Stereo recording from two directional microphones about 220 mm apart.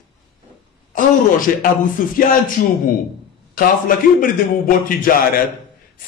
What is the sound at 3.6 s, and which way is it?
A man's voice, 40° left (ahead or behind).